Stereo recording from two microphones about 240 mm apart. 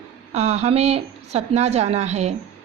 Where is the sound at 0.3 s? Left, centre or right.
Right.